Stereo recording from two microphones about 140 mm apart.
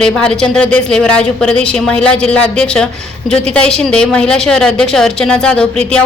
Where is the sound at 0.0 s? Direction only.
5° left (ahead or behind).